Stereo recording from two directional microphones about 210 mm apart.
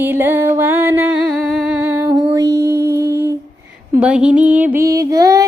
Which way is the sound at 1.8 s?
10° right (ahead or behind).